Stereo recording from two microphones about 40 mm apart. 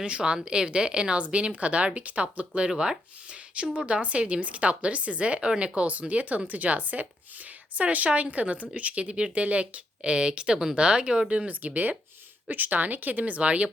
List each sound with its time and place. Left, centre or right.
0.0 s speech: right
2.6 s a woman's voice: centre
11.3 s a woman's voice: right